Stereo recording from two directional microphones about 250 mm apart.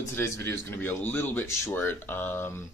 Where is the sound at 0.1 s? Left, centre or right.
Centre.